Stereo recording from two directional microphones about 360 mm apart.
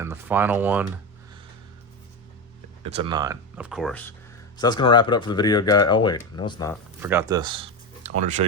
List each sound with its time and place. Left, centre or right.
0.0 s speech: centre
2.8 s speech: centre
7.0 s speech: centre